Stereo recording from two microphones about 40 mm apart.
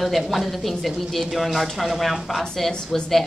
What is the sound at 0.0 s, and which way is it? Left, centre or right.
A woman's voice, centre.